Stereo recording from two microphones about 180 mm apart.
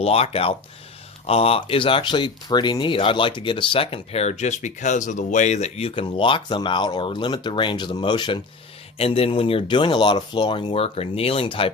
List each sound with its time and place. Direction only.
0.0 s speech: 35° left (ahead or behind)